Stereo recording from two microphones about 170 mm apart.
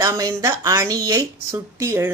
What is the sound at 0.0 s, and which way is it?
Speech, 20° right (ahead or behind).